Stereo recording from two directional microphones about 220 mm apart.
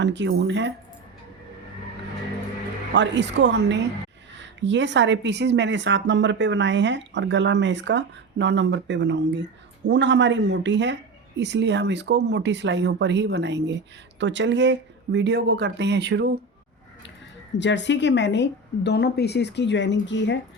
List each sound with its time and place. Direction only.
0.0 s speech: 55° right (ahead or behind)
2.9 s speech: 55° right (ahead or behind)
17.6 s a woman's voice: 55° left (ahead or behind)